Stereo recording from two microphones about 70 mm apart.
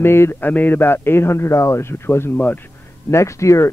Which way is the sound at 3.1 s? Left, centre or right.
Left.